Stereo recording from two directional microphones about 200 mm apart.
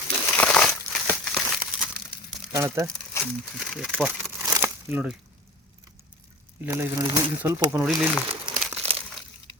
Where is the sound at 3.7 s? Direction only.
Centre (ahead or behind).